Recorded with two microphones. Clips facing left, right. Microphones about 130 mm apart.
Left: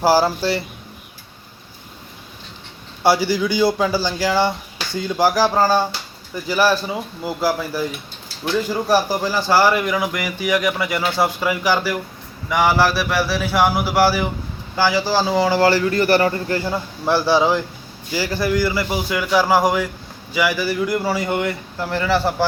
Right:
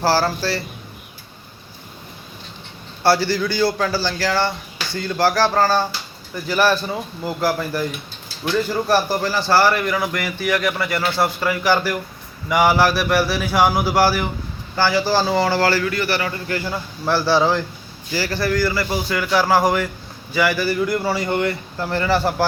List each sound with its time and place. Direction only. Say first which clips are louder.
0.0 s a man's voice: left 3 dB; 15° left (ahead or behind)
3.0 s a man's voice: left 1 dB; 15° left (ahead or behind)
15.9 s a man's voice: left 6 dB; 40° left (ahead or behind); by 22.4 s centre (ahead or behind)